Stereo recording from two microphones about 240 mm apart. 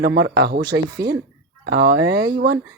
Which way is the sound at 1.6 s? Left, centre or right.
Right.